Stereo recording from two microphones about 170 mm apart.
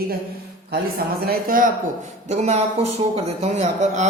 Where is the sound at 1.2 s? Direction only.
55° right (ahead or behind).